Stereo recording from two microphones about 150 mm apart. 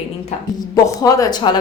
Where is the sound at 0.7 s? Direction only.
25° left (ahead or behind).